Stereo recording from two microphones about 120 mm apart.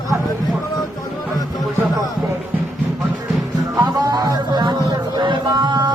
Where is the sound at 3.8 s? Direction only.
35° right (ahead or behind).